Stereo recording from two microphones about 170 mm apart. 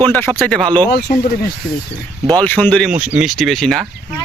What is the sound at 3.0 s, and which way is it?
Speech, 5° right (ahead or behind).